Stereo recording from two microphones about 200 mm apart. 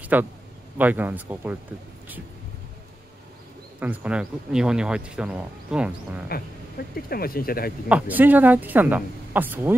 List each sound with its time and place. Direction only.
0.0 s speech: 10° right (ahead or behind)
3.8 s speech: 5° right (ahead or behind)
7.1 s speech: 50° left (ahead or behind)
7.9 s speech: 10° right (ahead or behind)